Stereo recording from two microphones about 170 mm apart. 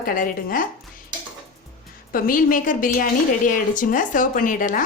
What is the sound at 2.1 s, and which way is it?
A woman's voice, 55° left (ahead or behind).